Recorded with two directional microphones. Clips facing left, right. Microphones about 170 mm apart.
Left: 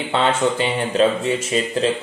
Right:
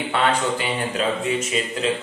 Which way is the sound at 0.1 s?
25° left (ahead or behind).